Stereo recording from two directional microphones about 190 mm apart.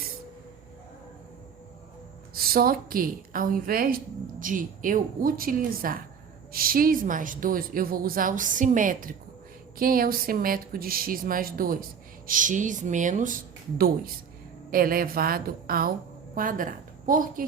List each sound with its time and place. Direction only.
2.3 s a woman's voice: 50° right (ahead or behind)